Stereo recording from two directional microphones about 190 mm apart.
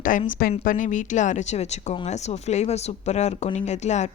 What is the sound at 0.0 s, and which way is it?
Speech, 45° left (ahead or behind).